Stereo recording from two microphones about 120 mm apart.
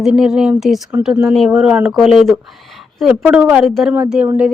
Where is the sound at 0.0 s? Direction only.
5° right (ahead or behind).